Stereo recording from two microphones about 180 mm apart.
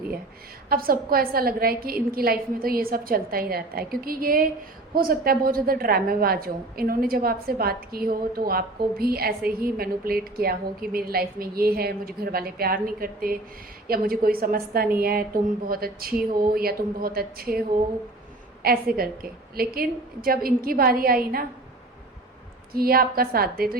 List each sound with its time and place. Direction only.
0.7 s a woman's voice: 55° right (ahead or behind)
22.7 s a woman's voice: 55° right (ahead or behind)